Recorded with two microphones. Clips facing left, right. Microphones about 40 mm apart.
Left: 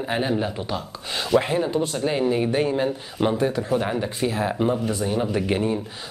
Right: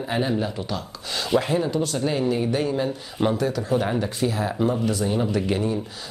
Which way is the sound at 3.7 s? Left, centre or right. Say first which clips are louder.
Right 1 dB; centre.